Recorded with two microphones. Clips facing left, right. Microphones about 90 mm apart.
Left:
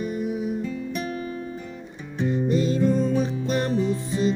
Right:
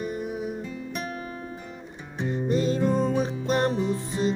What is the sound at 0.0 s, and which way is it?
Music, 40° right (ahead or behind).